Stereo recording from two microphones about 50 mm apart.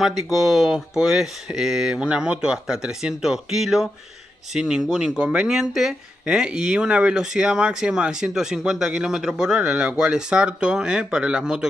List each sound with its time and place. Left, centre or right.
0.0 s speech: centre